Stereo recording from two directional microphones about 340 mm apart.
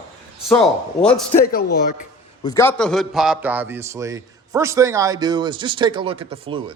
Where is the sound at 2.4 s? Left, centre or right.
Centre.